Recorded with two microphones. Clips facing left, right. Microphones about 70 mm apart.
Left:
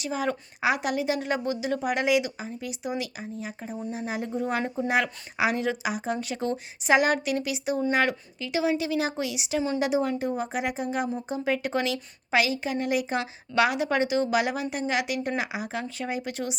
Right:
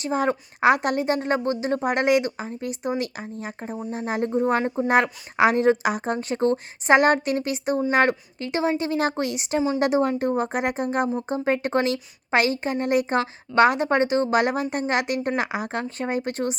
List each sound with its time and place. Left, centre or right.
0.0 s a woman's voice: right
6.1 s a woman's voice: right
11.3 s a woman's voice: right